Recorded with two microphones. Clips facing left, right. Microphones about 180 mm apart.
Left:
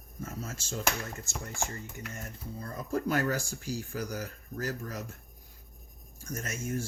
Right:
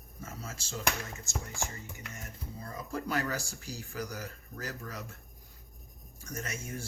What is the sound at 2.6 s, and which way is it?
Speech, 45° left (ahead or behind).